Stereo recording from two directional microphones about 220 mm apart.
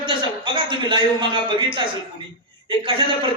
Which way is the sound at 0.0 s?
20° right (ahead or behind).